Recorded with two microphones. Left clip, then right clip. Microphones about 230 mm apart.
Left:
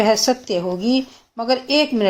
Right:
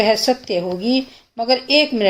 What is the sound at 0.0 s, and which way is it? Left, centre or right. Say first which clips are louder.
Speech: even; centre.